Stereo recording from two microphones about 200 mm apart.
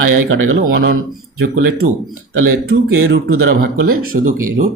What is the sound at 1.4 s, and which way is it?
Speech, 65° right (ahead or behind).